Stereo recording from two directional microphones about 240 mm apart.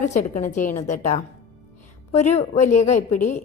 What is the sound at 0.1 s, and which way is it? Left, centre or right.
A woman's voice, left.